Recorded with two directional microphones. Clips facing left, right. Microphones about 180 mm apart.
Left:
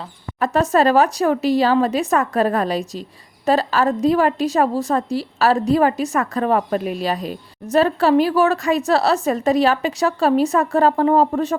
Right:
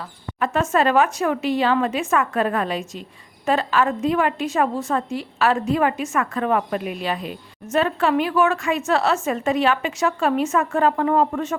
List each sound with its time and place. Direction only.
0.3 s a woman's voice: 40° left (ahead or behind)